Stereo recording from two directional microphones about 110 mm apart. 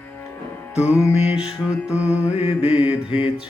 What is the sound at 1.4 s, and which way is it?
Music, 10° right (ahead or behind).